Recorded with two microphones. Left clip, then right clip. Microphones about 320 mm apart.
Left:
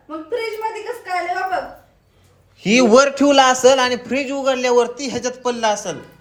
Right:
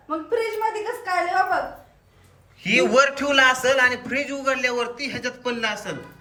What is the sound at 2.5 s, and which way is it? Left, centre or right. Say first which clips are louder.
A woman's voice: left 5 dB; centre.